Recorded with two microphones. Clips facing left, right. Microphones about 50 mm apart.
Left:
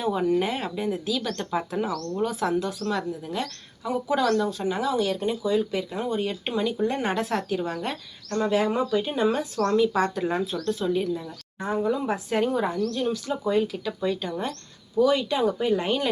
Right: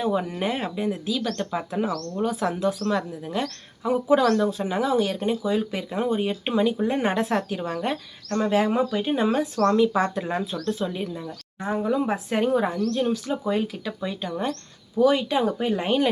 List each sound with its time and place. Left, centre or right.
0.0 s speech: centre
3.8 s speech: right
4.8 s speech: right
9.6 s speech: centre
14.0 s speech: centre
14.9 s speech: right